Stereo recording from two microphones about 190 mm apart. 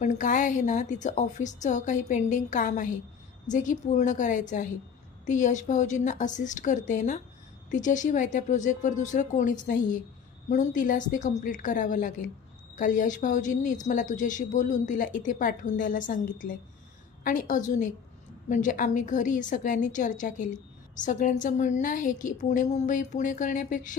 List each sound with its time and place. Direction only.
0.0 s a woman's voice: 40° left (ahead or behind)